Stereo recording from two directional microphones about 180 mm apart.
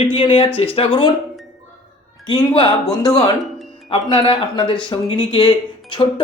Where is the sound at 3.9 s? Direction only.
30° left (ahead or behind).